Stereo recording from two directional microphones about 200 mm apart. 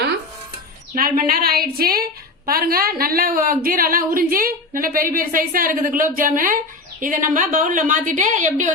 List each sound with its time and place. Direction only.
0.9 s a woman's voice: 45° right (ahead or behind)